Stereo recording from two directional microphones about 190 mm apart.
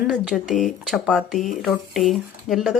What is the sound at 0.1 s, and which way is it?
Speech, centre (ahead or behind).